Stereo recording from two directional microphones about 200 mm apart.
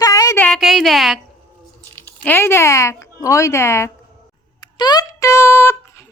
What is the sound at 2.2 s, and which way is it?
Speech, 10° left (ahead or behind).